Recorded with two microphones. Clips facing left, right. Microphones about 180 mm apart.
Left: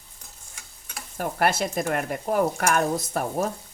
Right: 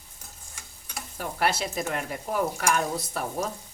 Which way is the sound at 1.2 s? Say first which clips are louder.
Left 4 dB; 50° left (ahead or behind).